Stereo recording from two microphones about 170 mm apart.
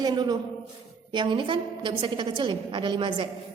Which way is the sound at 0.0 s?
25° right (ahead or behind).